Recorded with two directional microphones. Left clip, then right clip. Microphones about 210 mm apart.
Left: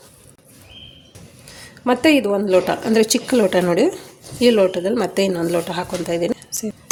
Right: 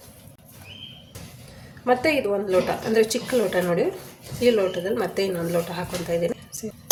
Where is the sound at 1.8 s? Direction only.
45° left (ahead or behind).